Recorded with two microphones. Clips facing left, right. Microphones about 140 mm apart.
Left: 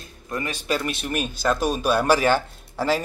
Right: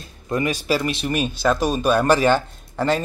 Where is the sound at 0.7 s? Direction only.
5° right (ahead or behind).